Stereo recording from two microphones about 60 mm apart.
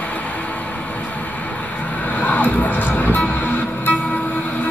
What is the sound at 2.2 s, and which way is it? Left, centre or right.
Music, left.